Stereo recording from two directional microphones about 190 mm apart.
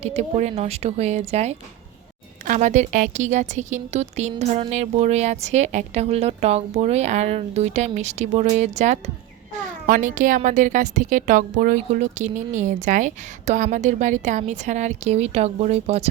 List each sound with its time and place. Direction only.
0.0 s a woman's voice: 35° right (ahead or behind)